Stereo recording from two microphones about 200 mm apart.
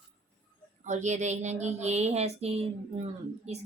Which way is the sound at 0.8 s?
35° right (ahead or behind).